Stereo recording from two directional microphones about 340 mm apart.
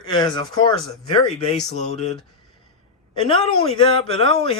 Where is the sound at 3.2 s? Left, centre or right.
Centre.